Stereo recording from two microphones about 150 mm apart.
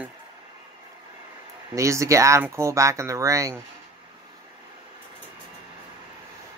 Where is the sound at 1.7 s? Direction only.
20° right (ahead or behind).